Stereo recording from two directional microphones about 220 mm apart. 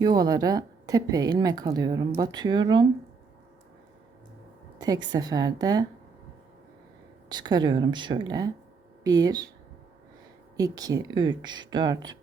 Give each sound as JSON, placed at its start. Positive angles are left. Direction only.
{"t": 0.0, "sound": "a woman's voice", "side_deg": -20}
{"t": 4.8, "sound": "a woman's voice", "side_deg": -20}
{"t": 7.3, "sound": "a woman's voice", "side_deg": -20}
{"t": 10.6, "sound": "speech", "side_deg": -15}